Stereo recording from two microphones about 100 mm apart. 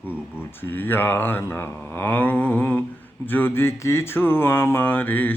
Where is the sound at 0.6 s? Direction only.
20° left (ahead or behind).